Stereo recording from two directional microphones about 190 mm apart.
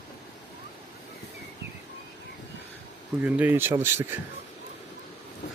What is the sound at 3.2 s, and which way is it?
Speech, 10° right (ahead or behind).